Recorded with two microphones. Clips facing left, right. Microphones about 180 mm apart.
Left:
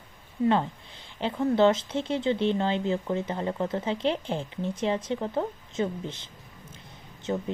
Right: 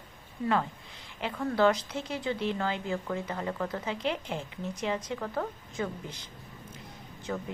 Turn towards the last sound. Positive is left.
turn(degrees=25)  # may be behind; listen again after turning